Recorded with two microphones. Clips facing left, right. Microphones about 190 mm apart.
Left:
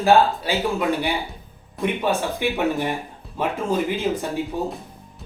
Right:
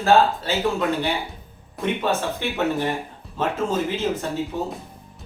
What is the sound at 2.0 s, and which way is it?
Speech, 15° left (ahead or behind).